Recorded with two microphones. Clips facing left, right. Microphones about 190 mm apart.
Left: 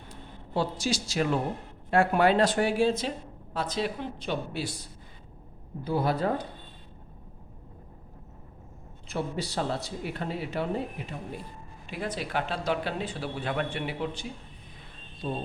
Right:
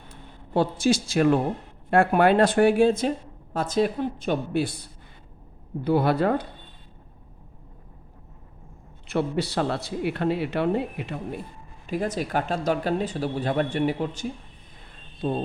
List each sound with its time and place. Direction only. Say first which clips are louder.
0.5 s speech: right 7 dB; 55° right (ahead or behind)
5.8 s speech: right 6 dB; 70° right (ahead or behind)
9.0 s speech: right 7 dB; 70° right (ahead or behind)
11.9 s speech: right 7 dB; 45° right (ahead or behind)